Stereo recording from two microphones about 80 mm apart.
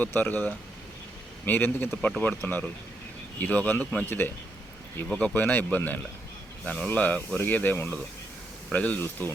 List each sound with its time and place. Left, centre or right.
0.0 s speech: left
2.0 s speech: centre
2.3 s speech: left